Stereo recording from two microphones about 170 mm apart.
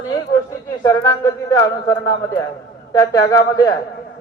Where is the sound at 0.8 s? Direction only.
20° left (ahead or behind).